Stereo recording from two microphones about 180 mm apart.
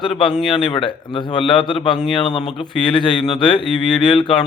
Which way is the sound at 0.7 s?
25° left (ahead or behind).